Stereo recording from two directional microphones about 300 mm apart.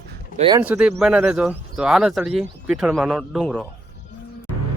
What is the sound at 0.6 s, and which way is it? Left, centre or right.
Speech, centre.